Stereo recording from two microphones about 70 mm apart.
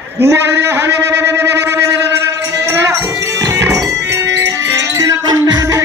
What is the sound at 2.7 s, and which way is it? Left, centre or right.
Music, right.